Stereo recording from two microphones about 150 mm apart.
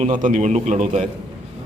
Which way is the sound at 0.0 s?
60° right (ahead or behind).